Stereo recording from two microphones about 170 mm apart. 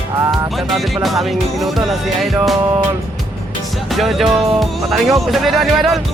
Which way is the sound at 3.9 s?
Centre (ahead or behind).